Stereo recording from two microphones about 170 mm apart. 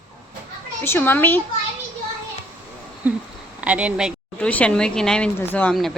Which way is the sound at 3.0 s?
10° right (ahead or behind).